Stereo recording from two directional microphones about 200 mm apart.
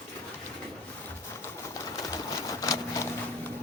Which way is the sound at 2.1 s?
15° left (ahead or behind).